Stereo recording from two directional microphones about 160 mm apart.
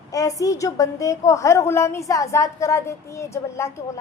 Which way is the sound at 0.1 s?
20° left (ahead or behind).